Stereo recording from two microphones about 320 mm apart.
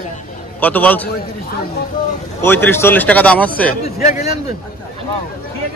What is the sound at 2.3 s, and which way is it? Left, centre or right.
Speech, centre.